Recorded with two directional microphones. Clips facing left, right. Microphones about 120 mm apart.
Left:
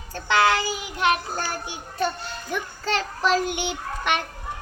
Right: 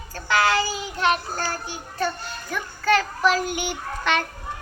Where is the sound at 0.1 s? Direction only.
25° left (ahead or behind).